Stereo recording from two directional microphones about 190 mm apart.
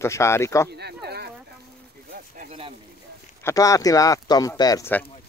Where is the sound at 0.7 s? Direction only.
60° right (ahead or behind).